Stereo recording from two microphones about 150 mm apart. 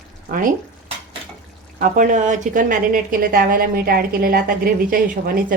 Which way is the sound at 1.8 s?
60° right (ahead or behind).